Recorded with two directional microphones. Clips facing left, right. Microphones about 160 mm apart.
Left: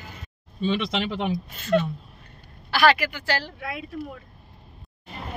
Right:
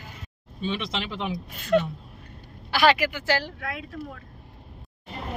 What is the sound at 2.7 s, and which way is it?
Speech, 20° right (ahead or behind).